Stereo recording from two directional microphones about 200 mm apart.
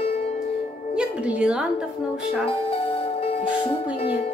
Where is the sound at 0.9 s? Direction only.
5° right (ahead or behind).